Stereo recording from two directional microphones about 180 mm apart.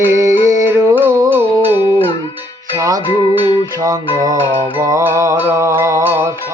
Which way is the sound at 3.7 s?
15° right (ahead or behind).